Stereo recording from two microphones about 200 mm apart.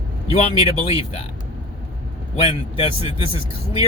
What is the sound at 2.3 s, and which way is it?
Speech, 25° left (ahead or behind).